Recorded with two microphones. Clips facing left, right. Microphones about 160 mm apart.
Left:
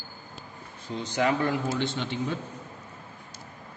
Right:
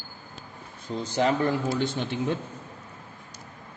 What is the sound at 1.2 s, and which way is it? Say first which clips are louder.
Speech: right 2 dB; 35° right (ahead or behind).